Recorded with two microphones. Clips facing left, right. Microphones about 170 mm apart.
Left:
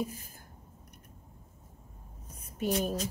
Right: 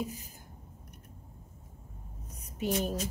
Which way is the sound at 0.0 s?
15° right (ahead or behind).